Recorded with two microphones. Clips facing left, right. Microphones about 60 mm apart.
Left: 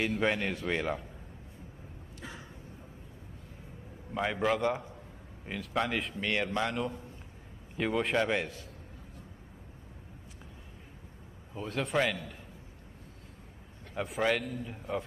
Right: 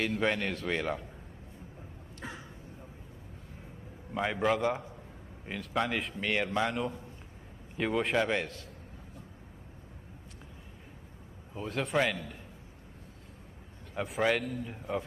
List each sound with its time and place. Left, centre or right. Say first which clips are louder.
0.0 s a man's voice: even; centre
2.2 s a sound: right 3 dB; right
4.1 s a man's voice: right 1 dB; centre
11.5 s a man's voice: even; centre
13.9 s a man's voice: right 1 dB; centre